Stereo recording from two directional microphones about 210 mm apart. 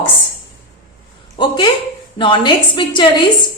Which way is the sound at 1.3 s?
20° left (ahead or behind).